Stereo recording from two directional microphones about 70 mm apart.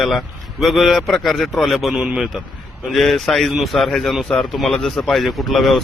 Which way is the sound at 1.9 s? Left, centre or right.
Centre.